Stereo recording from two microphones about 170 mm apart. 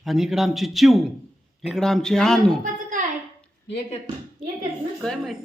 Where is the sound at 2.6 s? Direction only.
50° right (ahead or behind).